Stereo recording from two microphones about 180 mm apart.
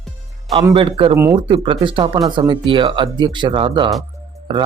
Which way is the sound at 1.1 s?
15° right (ahead or behind).